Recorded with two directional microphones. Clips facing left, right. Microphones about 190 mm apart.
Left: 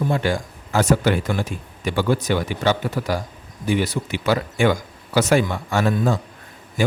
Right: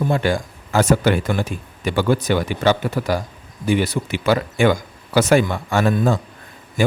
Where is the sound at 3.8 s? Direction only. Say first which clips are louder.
Right 2 dB; 60° right (ahead or behind).